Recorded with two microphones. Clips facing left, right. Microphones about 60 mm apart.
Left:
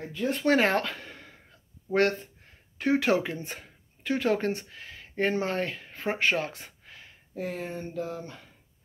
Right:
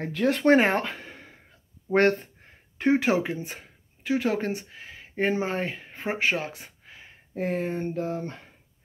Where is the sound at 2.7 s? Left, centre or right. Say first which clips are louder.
Right 3 dB; right.